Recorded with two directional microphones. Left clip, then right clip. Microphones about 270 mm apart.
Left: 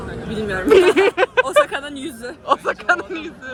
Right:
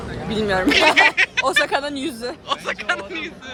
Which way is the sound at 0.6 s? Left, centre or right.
Centre.